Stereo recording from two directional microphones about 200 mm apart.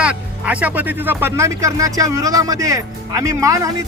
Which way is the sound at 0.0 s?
5° right (ahead or behind).